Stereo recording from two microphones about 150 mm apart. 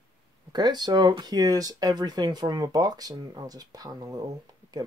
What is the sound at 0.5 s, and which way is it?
Speech, 30° right (ahead or behind).